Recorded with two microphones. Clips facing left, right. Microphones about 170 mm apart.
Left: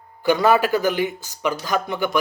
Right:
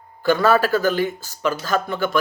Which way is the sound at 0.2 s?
15° left (ahead or behind).